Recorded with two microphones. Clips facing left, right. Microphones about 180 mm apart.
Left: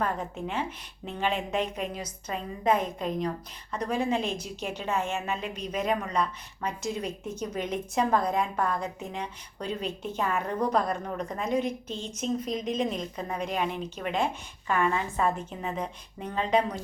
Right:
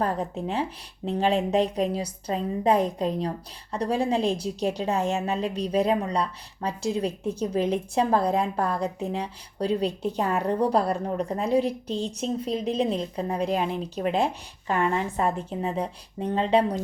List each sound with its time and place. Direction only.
0.0 s a woman's voice: 35° right (ahead or behind)